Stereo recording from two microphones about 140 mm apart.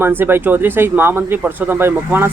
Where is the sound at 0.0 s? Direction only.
15° right (ahead or behind).